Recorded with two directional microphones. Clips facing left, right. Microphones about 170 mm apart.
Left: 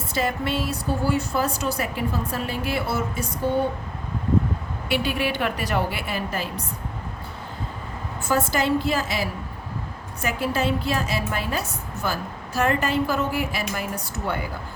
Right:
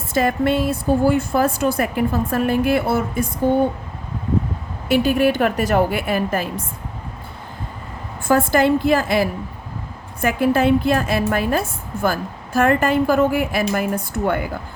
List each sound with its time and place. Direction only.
0.1 s a woman's voice: 50° right (ahead or behind)
4.9 s a woman's voice: 45° right (ahead or behind)
8.3 s a woman's voice: 55° right (ahead or behind)